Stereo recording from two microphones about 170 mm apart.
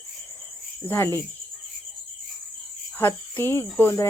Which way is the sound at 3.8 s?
15° left (ahead or behind).